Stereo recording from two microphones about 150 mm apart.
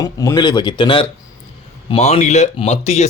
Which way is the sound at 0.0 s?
25° left (ahead or behind).